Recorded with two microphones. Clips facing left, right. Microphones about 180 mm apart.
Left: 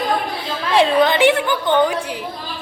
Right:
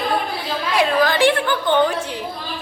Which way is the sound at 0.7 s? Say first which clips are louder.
Left 3 dB; 25° left (ahead or behind).